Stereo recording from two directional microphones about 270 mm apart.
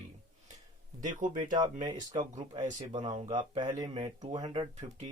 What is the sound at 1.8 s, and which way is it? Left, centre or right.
Speech, centre.